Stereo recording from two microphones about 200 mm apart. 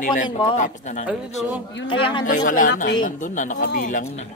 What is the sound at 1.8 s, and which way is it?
Speech, 25° left (ahead or behind).